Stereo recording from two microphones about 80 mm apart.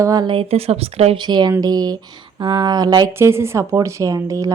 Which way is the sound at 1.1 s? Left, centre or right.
Right.